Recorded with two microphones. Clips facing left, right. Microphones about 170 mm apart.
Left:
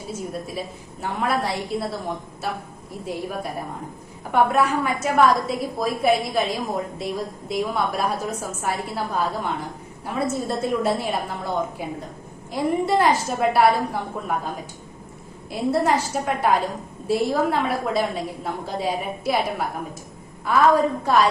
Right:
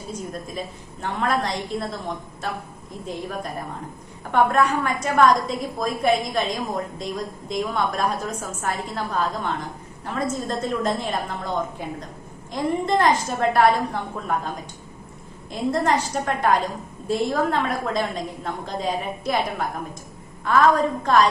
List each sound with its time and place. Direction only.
0.1 s a woman's voice: 5° left (ahead or behind)
3.1 s a woman's voice: 10° left (ahead or behind)
15.4 s a woman's voice: 5° left (ahead or behind)